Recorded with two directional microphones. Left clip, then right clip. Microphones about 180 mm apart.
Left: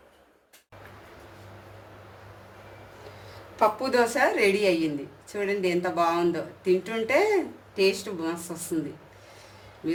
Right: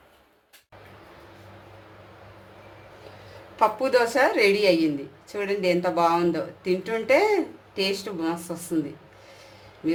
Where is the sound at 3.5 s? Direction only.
30° right (ahead or behind).